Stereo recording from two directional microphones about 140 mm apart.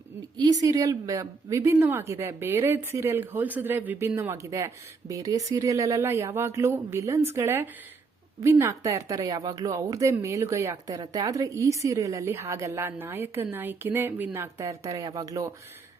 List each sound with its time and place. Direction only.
0.3 s a woman's voice: 30° right (ahead or behind)